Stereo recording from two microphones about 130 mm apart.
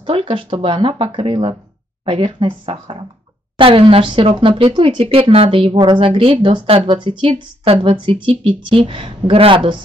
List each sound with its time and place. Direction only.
0.0 s a woman's voice: 40° right (ahead or behind)